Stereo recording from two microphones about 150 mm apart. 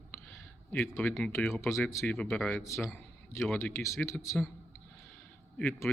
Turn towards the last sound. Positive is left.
turn(degrees=15)  # may be behind; listen again after turning